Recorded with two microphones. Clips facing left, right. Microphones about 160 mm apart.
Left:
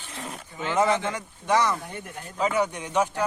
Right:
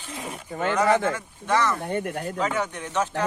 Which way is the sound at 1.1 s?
15° left (ahead or behind).